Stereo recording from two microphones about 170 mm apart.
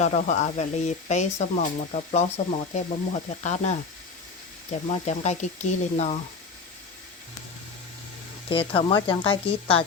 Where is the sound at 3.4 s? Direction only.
45° left (ahead or behind).